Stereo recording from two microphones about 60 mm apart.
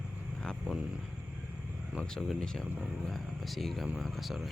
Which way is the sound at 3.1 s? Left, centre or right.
Centre.